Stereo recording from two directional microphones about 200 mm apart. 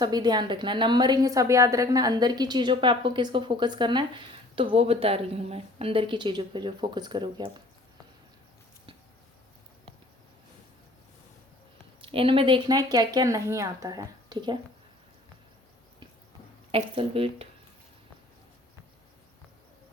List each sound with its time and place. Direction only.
0.0 s a woman's voice: 20° right (ahead or behind)
12.0 s a woman's voice: 25° right (ahead or behind)
16.7 s a woman's voice: 25° right (ahead or behind)